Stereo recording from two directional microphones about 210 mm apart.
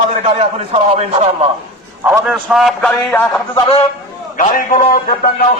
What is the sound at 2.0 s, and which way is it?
A man's voice, 5° right (ahead or behind).